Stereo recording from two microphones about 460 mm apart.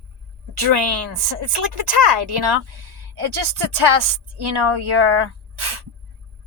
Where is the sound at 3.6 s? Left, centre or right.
Right.